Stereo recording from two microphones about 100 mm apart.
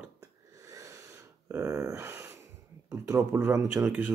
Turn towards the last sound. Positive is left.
turn(degrees=-15)  # may be behind; listen again after turning